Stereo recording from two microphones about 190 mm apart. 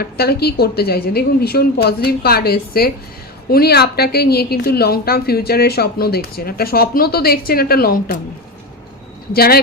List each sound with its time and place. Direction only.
0.0 s a woman's voice: 55° left (ahead or behind)
9.3 s speech: 55° left (ahead or behind)